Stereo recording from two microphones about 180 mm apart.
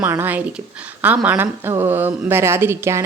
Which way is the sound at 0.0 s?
10° right (ahead or behind).